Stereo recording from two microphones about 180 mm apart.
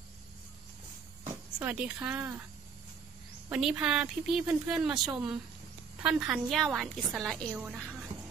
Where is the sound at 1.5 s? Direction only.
5° right (ahead or behind).